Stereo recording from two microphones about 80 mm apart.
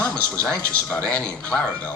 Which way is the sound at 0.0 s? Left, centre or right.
Centre.